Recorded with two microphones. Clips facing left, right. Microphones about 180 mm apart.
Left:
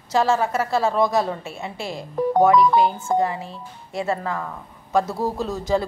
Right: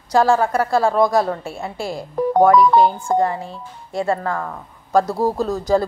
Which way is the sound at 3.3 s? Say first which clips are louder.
Right 3 dB; centre (ahead or behind).